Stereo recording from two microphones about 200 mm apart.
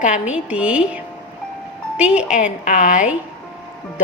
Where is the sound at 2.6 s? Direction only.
40° left (ahead or behind).